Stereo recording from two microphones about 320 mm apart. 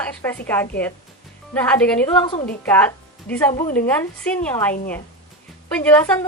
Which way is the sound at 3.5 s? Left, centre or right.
Centre.